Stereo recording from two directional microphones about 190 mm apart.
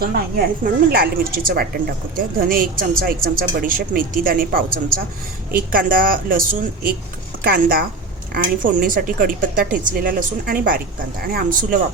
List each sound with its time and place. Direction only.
0.0 s a woman's voice: 55° right (ahead or behind)